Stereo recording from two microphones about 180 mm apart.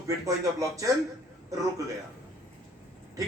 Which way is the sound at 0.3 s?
20° right (ahead or behind).